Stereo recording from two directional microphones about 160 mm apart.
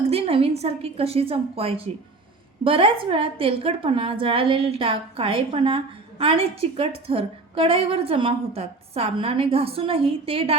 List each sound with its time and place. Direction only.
0.1 s a woman's voice: 40° right (ahead or behind)